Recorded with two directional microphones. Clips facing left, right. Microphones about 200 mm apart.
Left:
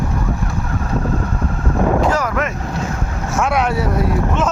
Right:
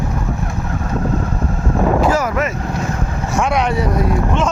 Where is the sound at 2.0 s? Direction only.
5° right (ahead or behind).